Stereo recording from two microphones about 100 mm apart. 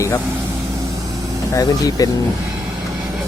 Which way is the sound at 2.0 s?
35° left (ahead or behind).